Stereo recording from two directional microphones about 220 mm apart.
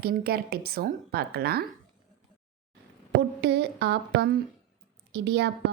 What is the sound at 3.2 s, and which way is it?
A woman's voice, 50° right (ahead or behind).